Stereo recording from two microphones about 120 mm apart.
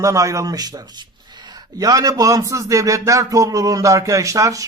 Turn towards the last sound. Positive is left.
turn(degrees=-25)  # may be behind; listen again after turning